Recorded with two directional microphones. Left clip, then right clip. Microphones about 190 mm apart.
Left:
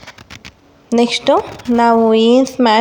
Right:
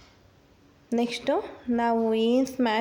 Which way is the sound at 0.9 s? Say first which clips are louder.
Left 14 dB; 15° left (ahead or behind).